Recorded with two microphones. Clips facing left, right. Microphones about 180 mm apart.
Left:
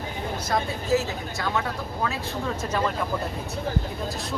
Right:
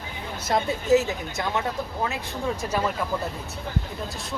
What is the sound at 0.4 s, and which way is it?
Speech, 20° right (ahead or behind).